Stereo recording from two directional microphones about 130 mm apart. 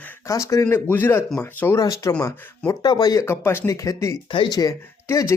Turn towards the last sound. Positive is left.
turn(degrees=25)  # may be behind; listen again after turning